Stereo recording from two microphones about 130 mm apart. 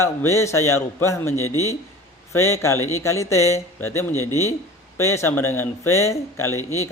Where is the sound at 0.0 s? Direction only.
20° left (ahead or behind).